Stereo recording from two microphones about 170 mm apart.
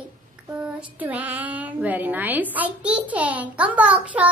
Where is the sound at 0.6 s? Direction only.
10° right (ahead or behind).